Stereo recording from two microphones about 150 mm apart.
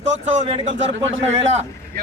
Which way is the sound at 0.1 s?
50° right (ahead or behind).